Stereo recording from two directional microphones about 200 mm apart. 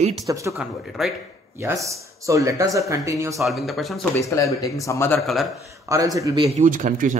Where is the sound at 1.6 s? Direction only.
15° right (ahead or behind).